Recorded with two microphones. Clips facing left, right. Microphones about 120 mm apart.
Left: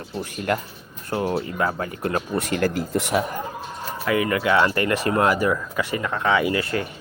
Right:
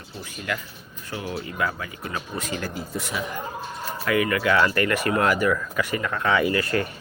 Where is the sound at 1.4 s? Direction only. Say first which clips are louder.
Left 4 dB; 35° left (ahead or behind).